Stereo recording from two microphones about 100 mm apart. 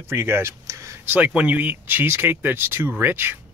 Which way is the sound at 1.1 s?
15° right (ahead or behind).